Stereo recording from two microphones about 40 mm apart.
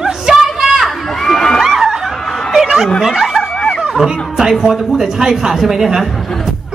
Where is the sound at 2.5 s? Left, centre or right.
Centre.